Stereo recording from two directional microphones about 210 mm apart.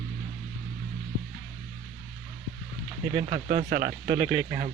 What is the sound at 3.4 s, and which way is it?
Speech, 45° right (ahead or behind).